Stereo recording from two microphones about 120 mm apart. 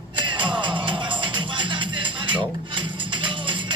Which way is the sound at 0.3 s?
40° right (ahead or behind).